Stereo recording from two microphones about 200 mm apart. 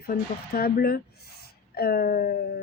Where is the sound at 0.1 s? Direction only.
50° left (ahead or behind).